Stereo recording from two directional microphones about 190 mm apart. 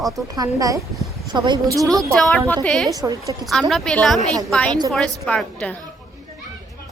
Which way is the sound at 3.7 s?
5° left (ahead or behind).